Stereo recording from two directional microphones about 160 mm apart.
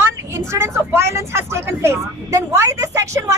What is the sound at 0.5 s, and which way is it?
Speech, 15° right (ahead or behind).